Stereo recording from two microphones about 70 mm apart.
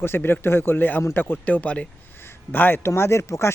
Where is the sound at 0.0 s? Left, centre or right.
Left; by 1.9 s centre.